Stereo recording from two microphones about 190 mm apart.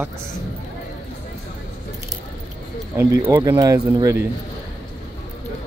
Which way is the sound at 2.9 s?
10° right (ahead or behind).